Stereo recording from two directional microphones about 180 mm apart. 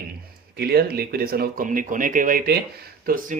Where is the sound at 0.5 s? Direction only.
60° right (ahead or behind).